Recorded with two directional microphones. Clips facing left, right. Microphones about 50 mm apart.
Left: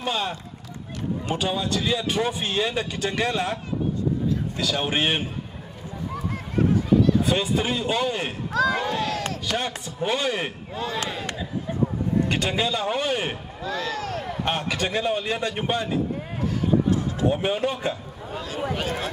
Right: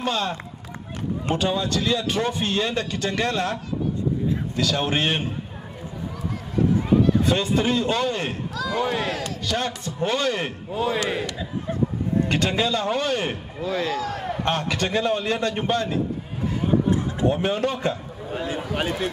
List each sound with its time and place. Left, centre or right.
0.0 s a man's voice: centre
4.6 s a man's voice: centre
7.2 s a man's voice: centre
8.5 s speech: left
8.8 s speech: right
9.5 s a man's voice: centre
10.7 s speech: right
12.3 s a man's voice: centre
13.6 s speech: right
14.4 s a man's voice: centre
16.6 s a sound: right
17.3 s a man's voice: centre
18.3 s speech: right